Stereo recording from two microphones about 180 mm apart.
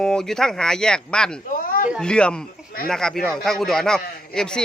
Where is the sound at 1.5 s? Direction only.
50° left (ahead or behind).